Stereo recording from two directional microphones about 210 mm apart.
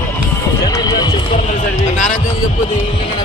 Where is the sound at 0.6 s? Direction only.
15° left (ahead or behind).